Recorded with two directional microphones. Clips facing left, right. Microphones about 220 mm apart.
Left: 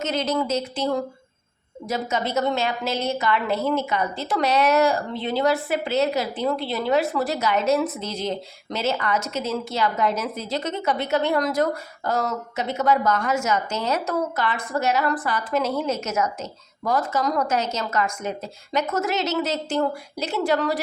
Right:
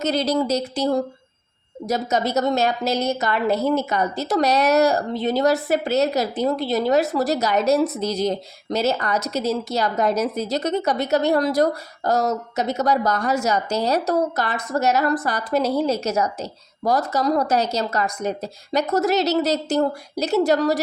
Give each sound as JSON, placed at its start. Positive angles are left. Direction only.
{"t": 0.0, "sound": "a woman's voice", "side_deg": -35}